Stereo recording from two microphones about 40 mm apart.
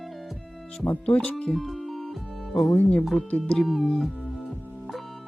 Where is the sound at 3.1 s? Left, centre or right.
Left.